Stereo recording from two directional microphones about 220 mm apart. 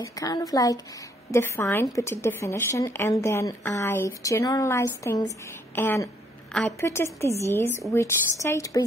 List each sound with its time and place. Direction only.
0.0 s a woman's voice: 15° left (ahead or behind)